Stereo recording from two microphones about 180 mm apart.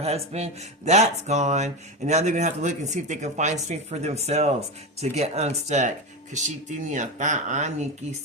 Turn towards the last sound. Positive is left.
turn(degrees=-40)  # may be behind; listen again after turning